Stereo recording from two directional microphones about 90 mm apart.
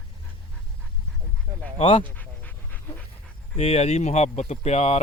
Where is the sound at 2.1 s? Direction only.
20° left (ahead or behind).